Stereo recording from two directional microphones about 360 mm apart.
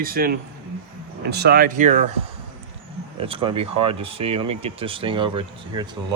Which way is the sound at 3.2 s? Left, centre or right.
Centre.